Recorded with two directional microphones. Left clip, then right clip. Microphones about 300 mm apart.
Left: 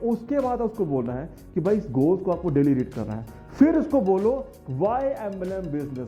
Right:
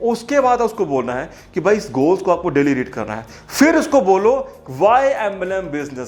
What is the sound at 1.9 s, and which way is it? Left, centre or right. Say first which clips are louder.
Speech: right 6 dB; right.